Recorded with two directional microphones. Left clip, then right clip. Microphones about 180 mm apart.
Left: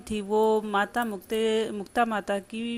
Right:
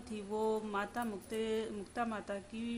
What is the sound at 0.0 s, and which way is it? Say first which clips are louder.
Speech: left 13 dB; 40° left (ahead or behind).